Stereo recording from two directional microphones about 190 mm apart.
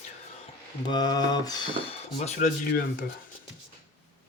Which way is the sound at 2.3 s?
40° left (ahead or behind).